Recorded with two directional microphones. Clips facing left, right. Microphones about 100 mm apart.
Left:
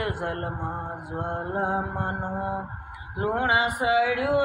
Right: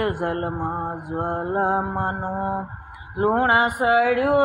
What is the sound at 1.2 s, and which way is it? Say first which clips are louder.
Music: right 5 dB; 50° right (ahead or behind).